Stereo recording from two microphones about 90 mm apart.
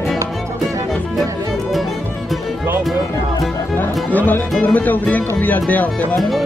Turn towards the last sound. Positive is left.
turn(degrees=20)  # may be behind; listen again after turning